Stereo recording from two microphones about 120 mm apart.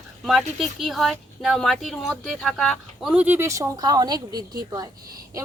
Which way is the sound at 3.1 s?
15° right (ahead or behind).